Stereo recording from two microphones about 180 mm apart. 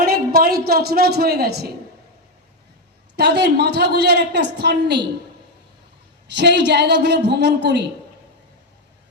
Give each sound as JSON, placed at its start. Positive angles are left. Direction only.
{"t": 0.0, "sound": "a woman's voice", "side_deg": -55}
{"t": 3.2, "sound": "a woman's voice", "side_deg": -65}
{"t": 6.3, "sound": "a woman's voice", "side_deg": -70}